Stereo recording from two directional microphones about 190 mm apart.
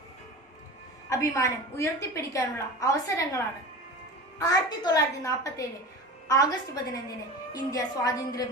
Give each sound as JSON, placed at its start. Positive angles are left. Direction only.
{"t": 1.0, "sound": "a woman's voice", "side_deg": 15}